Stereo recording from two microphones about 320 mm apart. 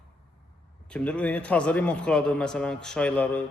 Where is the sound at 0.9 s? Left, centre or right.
Centre.